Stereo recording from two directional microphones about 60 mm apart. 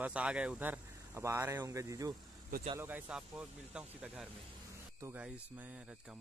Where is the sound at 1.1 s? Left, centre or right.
Right.